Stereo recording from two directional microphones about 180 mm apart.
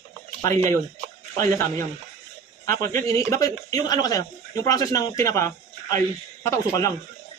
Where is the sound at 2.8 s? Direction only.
15° left (ahead or behind).